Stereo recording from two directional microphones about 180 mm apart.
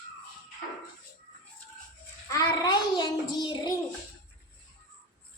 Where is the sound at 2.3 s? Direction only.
20° left (ahead or behind).